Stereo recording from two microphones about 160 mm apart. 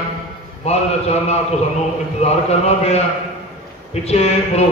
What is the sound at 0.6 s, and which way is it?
Speech, 40° left (ahead or behind).